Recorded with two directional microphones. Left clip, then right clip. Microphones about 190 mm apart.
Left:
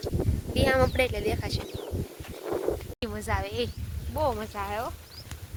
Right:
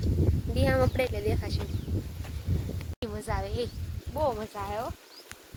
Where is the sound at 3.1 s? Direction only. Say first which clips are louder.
Left 3 dB; 10° left (ahead or behind).